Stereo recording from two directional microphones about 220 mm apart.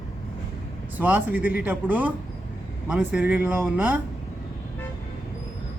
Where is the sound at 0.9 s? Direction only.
5° right (ahead or behind).